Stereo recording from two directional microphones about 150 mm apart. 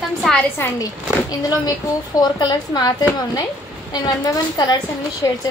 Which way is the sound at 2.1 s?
30° left (ahead or behind).